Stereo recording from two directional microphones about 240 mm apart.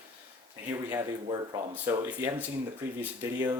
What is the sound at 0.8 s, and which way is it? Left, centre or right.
Speech, centre.